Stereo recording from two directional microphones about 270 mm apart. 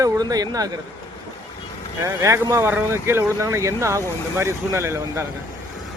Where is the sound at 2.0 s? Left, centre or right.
Centre.